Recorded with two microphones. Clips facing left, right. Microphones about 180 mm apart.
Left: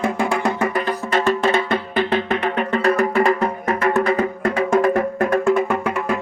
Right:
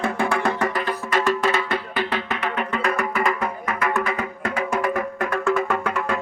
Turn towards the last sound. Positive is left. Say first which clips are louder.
# left 4 dB
turn(degrees=25)  # may be behind; listen again after turning